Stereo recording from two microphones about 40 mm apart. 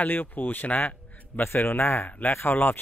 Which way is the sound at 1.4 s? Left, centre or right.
Left.